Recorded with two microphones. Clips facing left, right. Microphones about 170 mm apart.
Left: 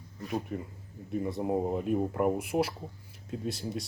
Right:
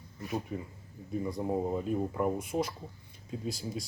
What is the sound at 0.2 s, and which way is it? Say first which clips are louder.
Speech: left 2 dB; centre (ahead or behind).